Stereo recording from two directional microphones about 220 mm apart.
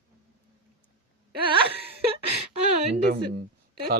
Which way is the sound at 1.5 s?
25° right (ahead or behind).